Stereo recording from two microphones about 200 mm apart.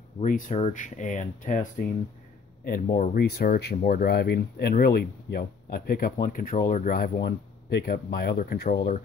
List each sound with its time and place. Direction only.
0.2 s speech: 40° left (ahead or behind)